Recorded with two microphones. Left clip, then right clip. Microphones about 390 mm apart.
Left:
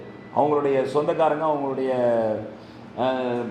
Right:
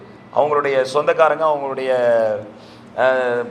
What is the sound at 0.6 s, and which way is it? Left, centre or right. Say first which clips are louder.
A man's voice: right 5 dB; right.